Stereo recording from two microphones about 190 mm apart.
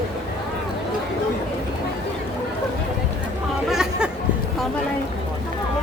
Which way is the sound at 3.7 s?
5° right (ahead or behind).